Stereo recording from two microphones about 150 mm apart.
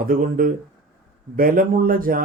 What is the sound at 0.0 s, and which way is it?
Speech, 70° right (ahead or behind).